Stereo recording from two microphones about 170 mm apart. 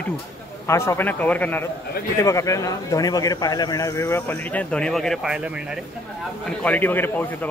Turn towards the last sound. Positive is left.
turn(degrees=10)  # may be behind; listen again after turning